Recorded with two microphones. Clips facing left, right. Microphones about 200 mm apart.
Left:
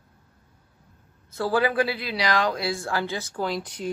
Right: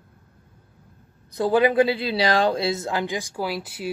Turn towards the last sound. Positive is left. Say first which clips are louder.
# even
turn(degrees=-5)  # may be behind; listen again after turning